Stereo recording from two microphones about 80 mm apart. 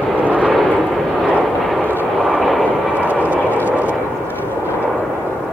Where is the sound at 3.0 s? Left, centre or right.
Centre.